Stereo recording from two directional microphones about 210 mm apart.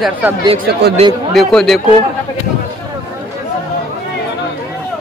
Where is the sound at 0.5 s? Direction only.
50° right (ahead or behind).